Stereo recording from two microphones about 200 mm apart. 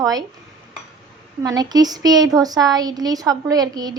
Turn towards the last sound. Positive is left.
turn(degrees=-20)  # may be behind; listen again after turning